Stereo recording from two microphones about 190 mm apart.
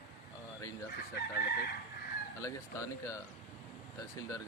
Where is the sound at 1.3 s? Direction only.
55° left (ahead or behind).